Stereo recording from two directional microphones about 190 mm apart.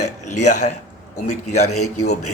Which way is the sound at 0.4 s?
40° left (ahead or behind).